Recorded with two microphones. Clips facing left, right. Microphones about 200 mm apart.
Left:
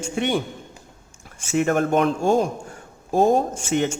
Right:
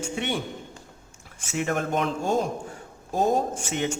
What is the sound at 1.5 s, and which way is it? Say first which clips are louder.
Speech: left 7 dB; 50° left (ahead or behind).